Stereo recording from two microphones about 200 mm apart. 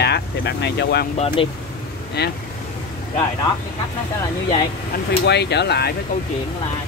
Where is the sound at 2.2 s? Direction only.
55° left (ahead or behind).